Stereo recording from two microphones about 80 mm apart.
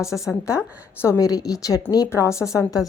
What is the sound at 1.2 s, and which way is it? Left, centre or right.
Speech, left.